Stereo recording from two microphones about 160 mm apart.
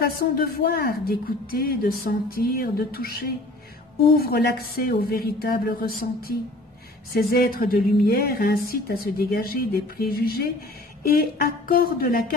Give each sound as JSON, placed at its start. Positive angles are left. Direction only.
{"t": 0.0, "sound": "a woman's voice", "side_deg": 75}